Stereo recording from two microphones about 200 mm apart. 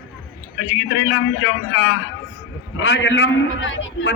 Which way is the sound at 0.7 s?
75° left (ahead or behind).